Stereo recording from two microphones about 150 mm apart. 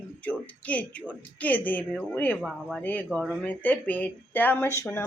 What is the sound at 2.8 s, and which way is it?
Speech, 10° left (ahead or behind).